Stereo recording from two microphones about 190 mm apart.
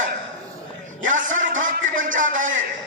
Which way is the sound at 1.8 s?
90° right.